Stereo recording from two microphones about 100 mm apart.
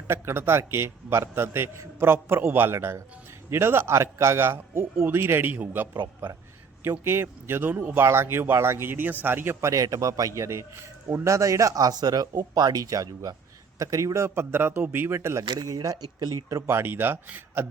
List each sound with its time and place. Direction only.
0.1 s a man's voice: 25° right (ahead or behind)
15.4 s a man's voice: 40° right (ahead or behind); by 17.7 s 20° right (ahead or behind)